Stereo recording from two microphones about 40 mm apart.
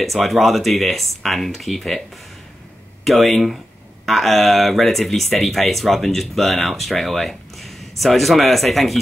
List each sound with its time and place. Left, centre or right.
0.0 s speech: centre
3.1 s speech: centre